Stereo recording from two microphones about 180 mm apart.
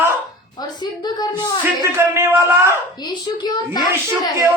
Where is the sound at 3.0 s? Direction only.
25° left (ahead or behind).